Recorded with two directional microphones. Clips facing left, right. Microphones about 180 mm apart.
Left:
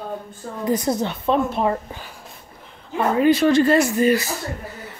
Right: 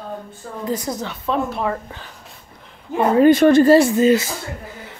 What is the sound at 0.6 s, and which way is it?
A woman's voice, 20° left (ahead or behind).